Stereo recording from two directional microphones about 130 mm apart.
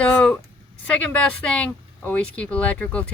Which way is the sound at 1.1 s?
10° left (ahead or behind).